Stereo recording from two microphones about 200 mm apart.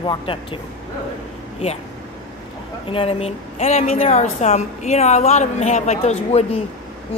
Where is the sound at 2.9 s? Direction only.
30° left (ahead or behind).